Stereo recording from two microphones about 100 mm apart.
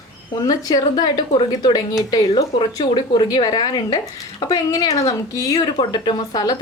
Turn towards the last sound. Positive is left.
turn(degrees=45)  # may be behind; listen again after turning